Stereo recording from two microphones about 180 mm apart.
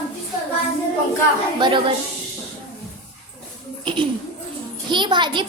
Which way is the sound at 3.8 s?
30° right (ahead or behind).